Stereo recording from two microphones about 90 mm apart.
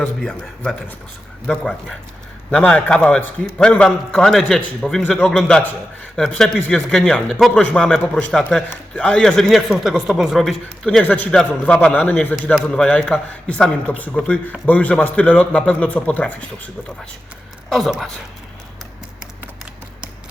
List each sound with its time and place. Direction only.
0.3 s a man's voice: 5° left (ahead or behind)
11.0 s a man's voice: 15° left (ahead or behind)
17.7 s speech: centre (ahead or behind)